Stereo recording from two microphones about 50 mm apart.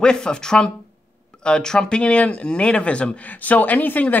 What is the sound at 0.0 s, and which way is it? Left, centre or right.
Speech, centre.